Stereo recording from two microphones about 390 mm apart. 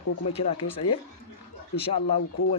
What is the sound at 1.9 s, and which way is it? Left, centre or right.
Speech, left.